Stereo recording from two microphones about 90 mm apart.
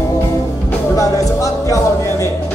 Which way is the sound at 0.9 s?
40° left (ahead or behind).